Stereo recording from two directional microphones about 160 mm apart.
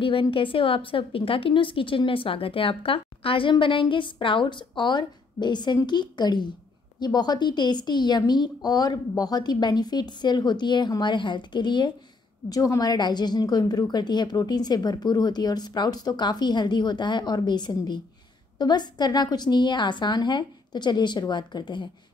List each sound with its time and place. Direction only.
0.0 s a woman's voice: 35° left (ahead or behind)